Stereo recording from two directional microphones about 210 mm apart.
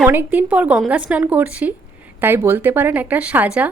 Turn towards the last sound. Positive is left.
turn(degrees=-5)  # may be behind; listen again after turning